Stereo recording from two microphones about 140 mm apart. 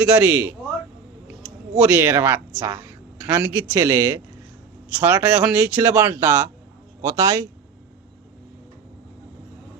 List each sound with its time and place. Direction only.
0.0 s speech: 10° right (ahead or behind)